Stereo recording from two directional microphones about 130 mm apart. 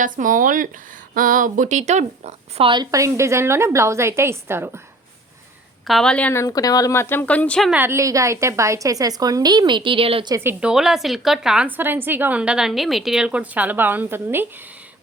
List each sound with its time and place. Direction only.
0.0 s speech: 90° right; by 2.6 s 60° right (ahead or behind)
2.9 s a woman's voice: 25° right (ahead or behind)
5.9 s a woman's voice: 5° left (ahead or behind)
6.3 s speech: 25° left (ahead or behind); by 7.7 s 10° left (ahead or behind)
7.7 s a woman's voice: 15° right (ahead or behind); by 10.2 s 45° right (ahead or behind)
10.4 s a woman's voice: 5° right (ahead or behind)